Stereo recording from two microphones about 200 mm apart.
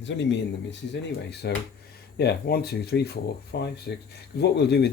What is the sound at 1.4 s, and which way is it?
Speech, 50° left (ahead or behind).